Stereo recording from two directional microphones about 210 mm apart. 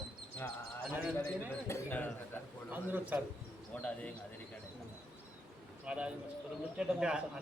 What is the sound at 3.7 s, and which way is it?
Speech, 5° left (ahead or behind).